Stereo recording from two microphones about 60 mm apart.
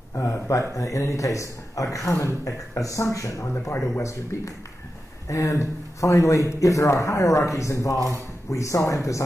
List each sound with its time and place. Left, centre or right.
0.1 s a man's voice: left
3.7 s speech: left
4.0 s a man's voice: left